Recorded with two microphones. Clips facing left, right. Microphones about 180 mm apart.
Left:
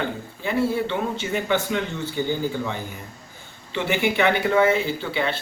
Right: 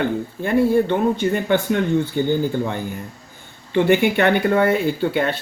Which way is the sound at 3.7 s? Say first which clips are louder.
Right 7 dB; 55° right (ahead or behind).